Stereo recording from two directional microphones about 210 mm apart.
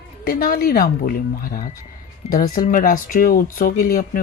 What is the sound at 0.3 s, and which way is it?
Speech, 45° left (ahead or behind).